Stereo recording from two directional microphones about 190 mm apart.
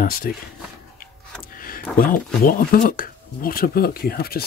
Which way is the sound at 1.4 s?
50° left (ahead or behind).